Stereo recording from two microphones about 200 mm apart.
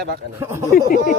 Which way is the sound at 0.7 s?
45° left (ahead or behind).